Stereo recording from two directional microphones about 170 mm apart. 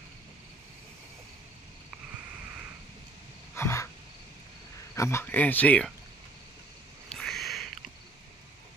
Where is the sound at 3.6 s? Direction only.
15° left (ahead or behind).